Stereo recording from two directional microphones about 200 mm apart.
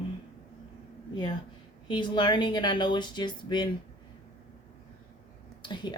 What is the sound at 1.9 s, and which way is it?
Speech, 20° left (ahead or behind).